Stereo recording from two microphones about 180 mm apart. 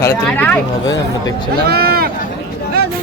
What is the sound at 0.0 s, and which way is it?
Speech, 10° left (ahead or behind).